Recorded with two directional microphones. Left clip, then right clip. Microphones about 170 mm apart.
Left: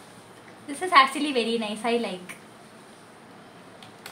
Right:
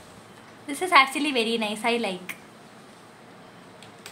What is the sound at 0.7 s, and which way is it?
A woman's voice, 30° right (ahead or behind).